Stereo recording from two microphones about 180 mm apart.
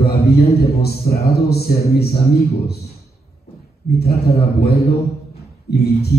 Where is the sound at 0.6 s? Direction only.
60° left (ahead or behind).